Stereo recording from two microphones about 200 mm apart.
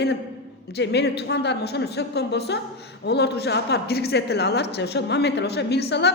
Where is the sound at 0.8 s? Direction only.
55° left (ahead or behind).